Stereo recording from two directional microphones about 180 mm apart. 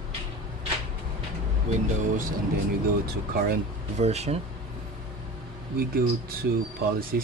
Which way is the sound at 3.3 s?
55° right (ahead or behind).